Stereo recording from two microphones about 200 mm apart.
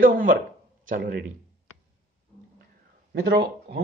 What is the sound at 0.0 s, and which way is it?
A man's voice, 45° right (ahead or behind).